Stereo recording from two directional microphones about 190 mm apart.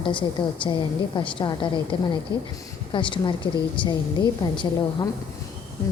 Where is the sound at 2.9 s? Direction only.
25° left (ahead or behind).